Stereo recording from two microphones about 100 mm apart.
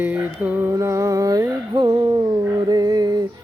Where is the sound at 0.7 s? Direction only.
30° right (ahead or behind); by 2.2 s 45° right (ahead or behind).